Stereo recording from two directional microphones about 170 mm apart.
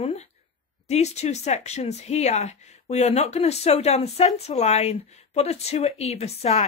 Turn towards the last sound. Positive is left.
turn(degrees=40)  # may be behind; listen again after turning